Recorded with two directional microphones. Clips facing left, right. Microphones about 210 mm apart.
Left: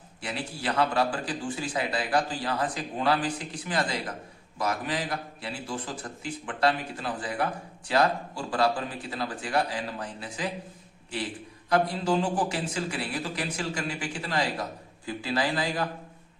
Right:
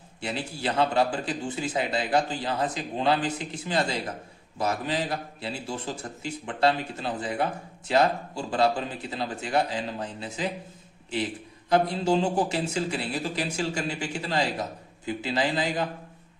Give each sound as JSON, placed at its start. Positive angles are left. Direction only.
{"t": 0.2, "sound": "speech", "side_deg": -25}
{"t": 11.7, "sound": "speech", "side_deg": -25}